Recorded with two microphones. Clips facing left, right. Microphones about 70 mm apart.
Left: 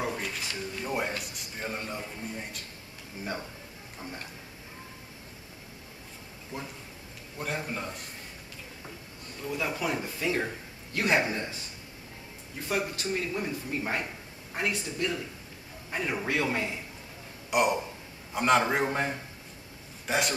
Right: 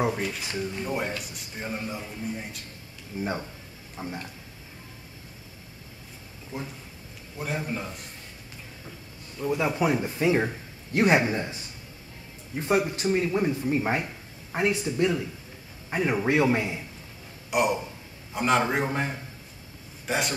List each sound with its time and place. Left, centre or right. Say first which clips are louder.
0.8 s speech: right 1 dB; centre
3.1 s a man's voice: right 5 dB; right
6.5 s speech: right 3 dB; centre
9.4 s a man's voice: right 7 dB; right
12.5 s a man's voice: right 7 dB; right
17.5 s a man's voice: right 1 dB; centre